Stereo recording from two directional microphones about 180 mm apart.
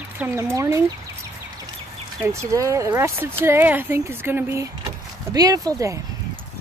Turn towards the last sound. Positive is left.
turn(degrees=-20)  # may be behind; listen again after turning